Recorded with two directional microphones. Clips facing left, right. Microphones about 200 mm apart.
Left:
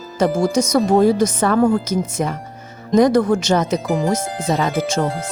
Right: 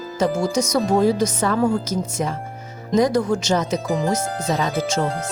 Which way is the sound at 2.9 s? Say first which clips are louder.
Left 4 dB; 55° left (ahead or behind).